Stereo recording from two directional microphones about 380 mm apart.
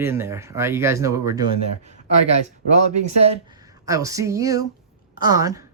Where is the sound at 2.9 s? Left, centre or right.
Centre.